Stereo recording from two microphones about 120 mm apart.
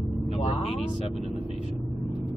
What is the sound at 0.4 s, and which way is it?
Vehicle, 70° left (ahead or behind).